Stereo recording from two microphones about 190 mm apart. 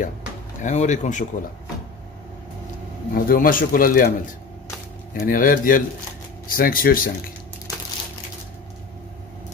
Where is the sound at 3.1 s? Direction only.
50° left (ahead or behind).